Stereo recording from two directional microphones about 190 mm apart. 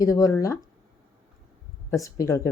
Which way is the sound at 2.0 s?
15° left (ahead or behind).